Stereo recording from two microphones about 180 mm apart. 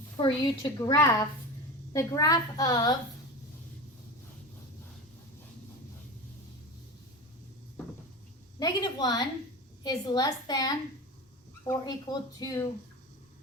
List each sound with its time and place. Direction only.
0.2 s a woman's voice: 20° left (ahead or behind)
8.5 s speech: 20° left (ahead or behind)